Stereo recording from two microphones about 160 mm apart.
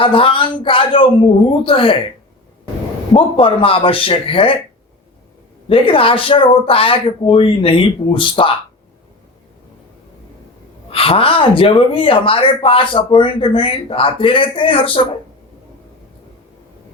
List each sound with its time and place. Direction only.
0.0 s speech: 35° left (ahead or behind)
3.1 s speech: 35° left (ahead or behind)
5.6 s speech: 35° left (ahead or behind)
10.8 s speech: 35° left (ahead or behind)